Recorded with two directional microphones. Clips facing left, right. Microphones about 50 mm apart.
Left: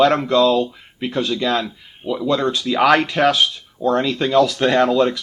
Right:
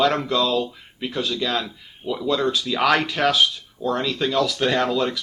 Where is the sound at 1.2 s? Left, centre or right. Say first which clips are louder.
Left 4 dB; left.